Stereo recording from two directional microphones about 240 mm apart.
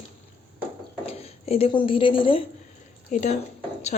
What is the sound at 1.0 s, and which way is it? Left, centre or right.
A woman's voice, left.